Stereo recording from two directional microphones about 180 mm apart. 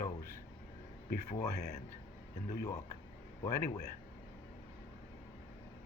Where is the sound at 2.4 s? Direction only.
50° left (ahead or behind).